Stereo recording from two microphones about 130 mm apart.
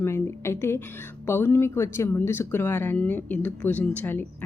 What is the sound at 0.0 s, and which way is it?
Speech, 20° left (ahead or behind).